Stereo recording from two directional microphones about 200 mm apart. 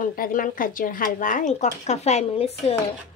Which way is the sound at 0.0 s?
40° left (ahead or behind).